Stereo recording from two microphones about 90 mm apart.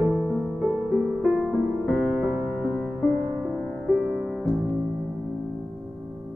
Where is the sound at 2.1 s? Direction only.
15° right (ahead or behind).